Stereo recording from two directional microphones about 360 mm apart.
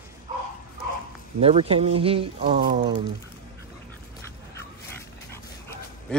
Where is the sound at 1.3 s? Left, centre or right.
Centre.